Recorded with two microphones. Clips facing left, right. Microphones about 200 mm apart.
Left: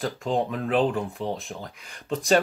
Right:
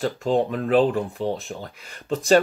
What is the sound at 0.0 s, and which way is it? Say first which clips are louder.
Speech: right 4 dB; 35° right (ahead or behind).